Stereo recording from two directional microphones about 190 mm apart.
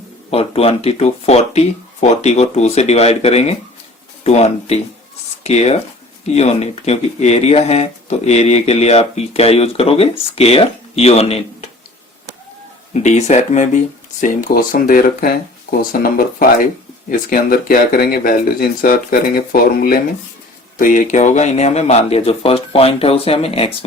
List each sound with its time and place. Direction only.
0.3 s speech: 30° left (ahead or behind)
12.9 s speech: 35° left (ahead or behind)